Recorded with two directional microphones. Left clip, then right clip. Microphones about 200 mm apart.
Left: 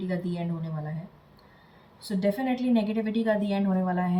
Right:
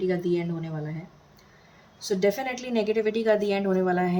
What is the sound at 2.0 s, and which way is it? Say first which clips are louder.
A woman's voice: right 3 dB; 40° right (ahead or behind).